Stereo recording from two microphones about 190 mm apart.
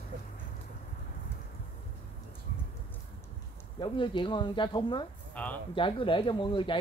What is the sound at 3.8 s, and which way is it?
Speech, 25° left (ahead or behind).